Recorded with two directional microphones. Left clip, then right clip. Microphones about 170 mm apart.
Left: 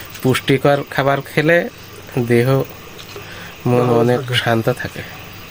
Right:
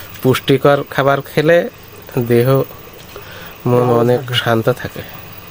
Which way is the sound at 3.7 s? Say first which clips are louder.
Right 2 dB; 10° right (ahead or behind).